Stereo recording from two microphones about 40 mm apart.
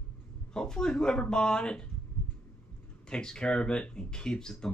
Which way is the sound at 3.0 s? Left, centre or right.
Centre.